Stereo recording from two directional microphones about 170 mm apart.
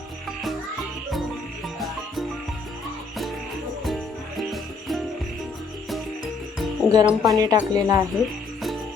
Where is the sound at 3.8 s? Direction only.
Centre (ahead or behind).